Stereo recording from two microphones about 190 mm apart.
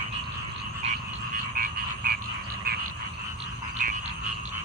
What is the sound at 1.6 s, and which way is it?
Frog, 50° right (ahead or behind).